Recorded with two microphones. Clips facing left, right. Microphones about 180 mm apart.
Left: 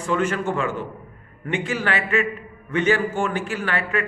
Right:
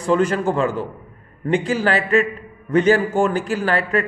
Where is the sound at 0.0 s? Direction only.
35° right (ahead or behind).